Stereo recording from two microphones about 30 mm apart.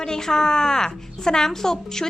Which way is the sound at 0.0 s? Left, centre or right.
Centre.